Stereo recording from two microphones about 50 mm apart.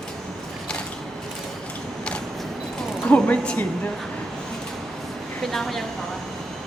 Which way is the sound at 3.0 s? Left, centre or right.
Left.